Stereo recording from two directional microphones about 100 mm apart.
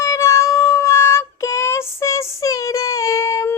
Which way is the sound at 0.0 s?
30° left (ahead or behind).